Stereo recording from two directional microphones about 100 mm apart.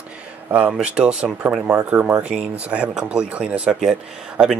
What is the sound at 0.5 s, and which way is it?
Speech, 15° right (ahead or behind).